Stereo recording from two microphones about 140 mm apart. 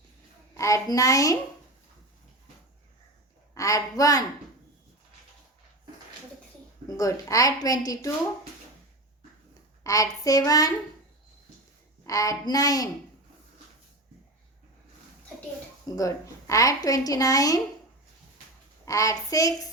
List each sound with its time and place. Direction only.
0.5 s a woman's voice: 20° left (ahead or behind)
3.5 s a woman's voice: 25° left (ahead or behind)
6.8 s a woman's voice: 25° left (ahead or behind)
9.8 s a woman's voice: 25° left (ahead or behind)
12.0 s a woman's voice: 25° left (ahead or behind)
16.0 s a woman's voice: 25° left (ahead or behind)
18.9 s a woman's voice: 25° left (ahead or behind)